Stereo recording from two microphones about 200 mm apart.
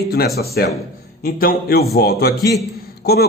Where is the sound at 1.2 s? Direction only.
50° left (ahead or behind).